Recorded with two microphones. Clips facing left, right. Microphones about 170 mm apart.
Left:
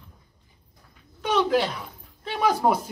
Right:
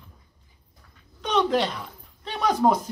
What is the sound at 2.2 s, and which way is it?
Speech, 10° left (ahead or behind).